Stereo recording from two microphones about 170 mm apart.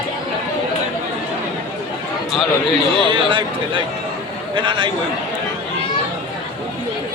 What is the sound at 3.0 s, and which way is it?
A man's voice, 30° right (ahead or behind).